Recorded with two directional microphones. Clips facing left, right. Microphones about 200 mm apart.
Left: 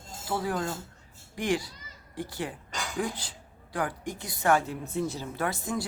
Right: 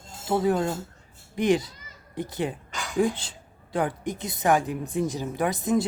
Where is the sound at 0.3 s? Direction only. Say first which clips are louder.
Right 7 dB; 20° right (ahead or behind).